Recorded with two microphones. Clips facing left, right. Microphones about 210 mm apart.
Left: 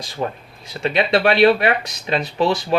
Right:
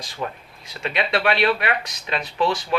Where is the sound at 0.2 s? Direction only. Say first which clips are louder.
Left 5 dB; 35° left (ahead or behind).